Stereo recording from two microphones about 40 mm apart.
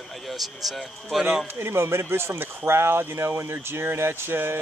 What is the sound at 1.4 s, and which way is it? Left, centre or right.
Speech, right.